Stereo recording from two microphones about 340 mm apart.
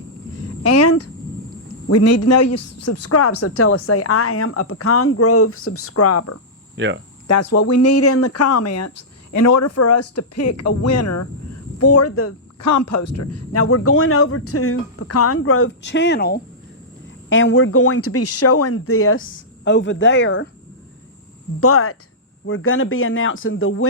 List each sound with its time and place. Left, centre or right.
0.6 s a sound: left
1.9 s speech: left
6.7 s cricket: right
7.3 s speech: left
21.6 s speech: left